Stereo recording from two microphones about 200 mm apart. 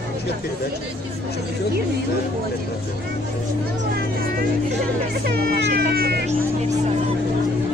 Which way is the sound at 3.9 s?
50° right (ahead or behind).